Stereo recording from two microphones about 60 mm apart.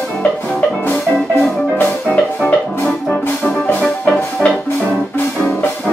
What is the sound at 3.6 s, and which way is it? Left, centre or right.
Music, centre.